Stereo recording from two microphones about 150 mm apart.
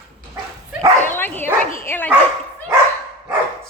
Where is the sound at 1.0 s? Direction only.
15° left (ahead or behind).